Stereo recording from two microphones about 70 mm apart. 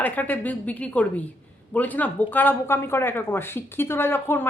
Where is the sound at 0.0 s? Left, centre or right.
Left.